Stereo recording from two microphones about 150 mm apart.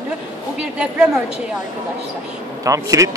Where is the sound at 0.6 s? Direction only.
5° right (ahead or behind).